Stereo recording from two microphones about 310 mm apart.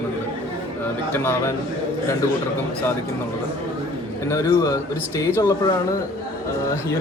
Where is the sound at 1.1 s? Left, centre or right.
Centre.